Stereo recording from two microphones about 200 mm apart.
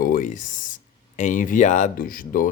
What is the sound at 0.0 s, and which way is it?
Speech, 40° left (ahead or behind).